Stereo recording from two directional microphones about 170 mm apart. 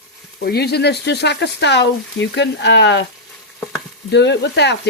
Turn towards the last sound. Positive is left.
turn(degrees=85)